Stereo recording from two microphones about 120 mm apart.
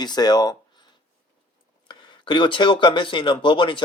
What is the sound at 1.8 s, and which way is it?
Speech, 40° left (ahead or behind).